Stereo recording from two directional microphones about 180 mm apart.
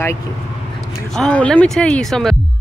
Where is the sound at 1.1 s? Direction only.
5° left (ahead or behind).